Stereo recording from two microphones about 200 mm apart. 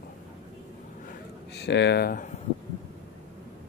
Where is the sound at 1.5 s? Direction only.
60° left (ahead or behind).